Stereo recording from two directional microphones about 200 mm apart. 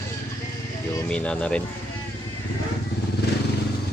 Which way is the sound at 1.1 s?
5° left (ahead or behind).